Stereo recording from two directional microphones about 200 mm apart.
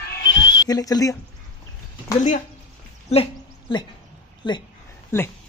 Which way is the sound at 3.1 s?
25° left (ahead or behind).